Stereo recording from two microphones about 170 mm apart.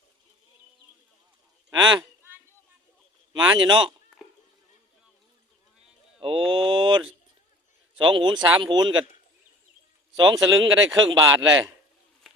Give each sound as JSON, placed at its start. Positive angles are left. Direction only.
{"t": 1.8, "sound": "speech", "side_deg": -25}
{"t": 3.3, "sound": "speech", "side_deg": -25}
{"t": 6.1, "sound": "mantra", "side_deg": -30}
{"t": 7.9, "sound": "speech", "side_deg": -30}
{"t": 10.2, "sound": "speech", "side_deg": -25}